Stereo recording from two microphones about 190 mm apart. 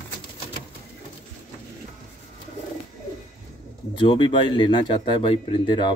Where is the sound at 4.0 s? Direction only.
25° left (ahead or behind).